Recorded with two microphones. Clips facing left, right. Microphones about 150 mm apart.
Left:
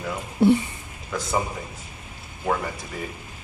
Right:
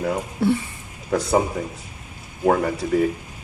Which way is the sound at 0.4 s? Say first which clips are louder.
Left 3 dB; 20° left (ahead or behind).